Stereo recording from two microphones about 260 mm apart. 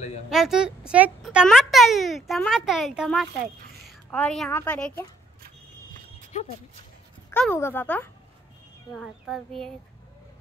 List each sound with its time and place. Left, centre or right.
0.3 s speech: centre
6.3 s speech: left
7.2 s a woman's voice: centre